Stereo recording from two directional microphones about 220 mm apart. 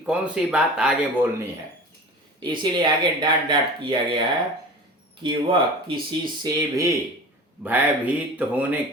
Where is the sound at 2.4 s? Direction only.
20° right (ahead or behind).